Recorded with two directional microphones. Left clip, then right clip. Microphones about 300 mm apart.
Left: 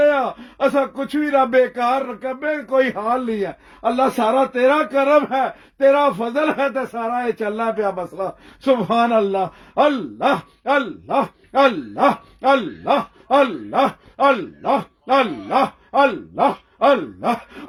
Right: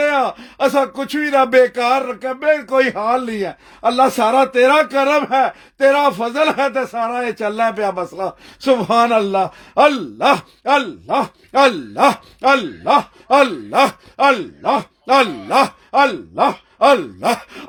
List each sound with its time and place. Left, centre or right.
0.0 s a man's voice: right